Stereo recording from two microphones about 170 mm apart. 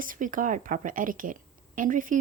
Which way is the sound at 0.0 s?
50° right (ahead or behind).